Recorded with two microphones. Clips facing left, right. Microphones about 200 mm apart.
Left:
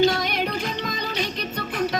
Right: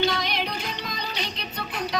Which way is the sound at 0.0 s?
50° left (ahead or behind).